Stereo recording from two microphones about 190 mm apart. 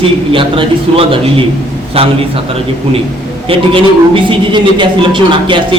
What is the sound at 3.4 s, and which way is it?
A man's voice, 30° right (ahead or behind).